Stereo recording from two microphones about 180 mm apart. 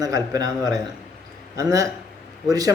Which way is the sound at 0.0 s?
20° right (ahead or behind).